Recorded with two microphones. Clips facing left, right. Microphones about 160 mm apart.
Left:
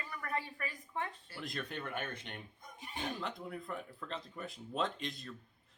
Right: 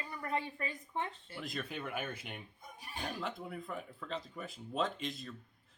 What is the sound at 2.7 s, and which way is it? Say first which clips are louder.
Speech: left 1 dB; 20° left (ahead or behind).